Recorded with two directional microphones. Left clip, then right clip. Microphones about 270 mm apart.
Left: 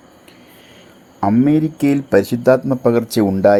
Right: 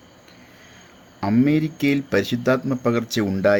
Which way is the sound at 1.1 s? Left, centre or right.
Centre.